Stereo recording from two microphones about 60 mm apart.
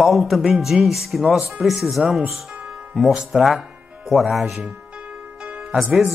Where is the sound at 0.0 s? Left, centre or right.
Centre.